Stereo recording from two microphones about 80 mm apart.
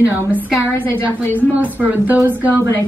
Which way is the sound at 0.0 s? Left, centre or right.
Centre.